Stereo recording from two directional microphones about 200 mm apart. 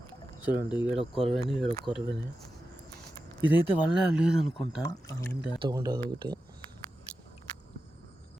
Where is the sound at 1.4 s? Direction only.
Centre (ahead or behind).